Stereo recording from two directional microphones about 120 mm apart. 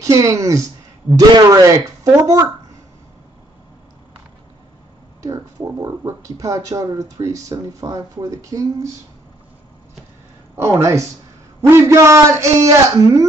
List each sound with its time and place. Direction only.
0.2 s speech: 25° right (ahead or behind)
5.2 s speech: 25° right (ahead or behind)
10.5 s speech: 20° right (ahead or behind)